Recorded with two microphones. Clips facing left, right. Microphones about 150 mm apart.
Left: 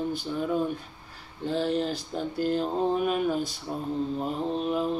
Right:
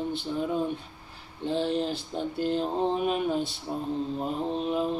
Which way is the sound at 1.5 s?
25° right (ahead or behind).